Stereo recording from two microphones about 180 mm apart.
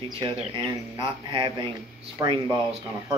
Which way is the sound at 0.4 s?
30° right (ahead or behind).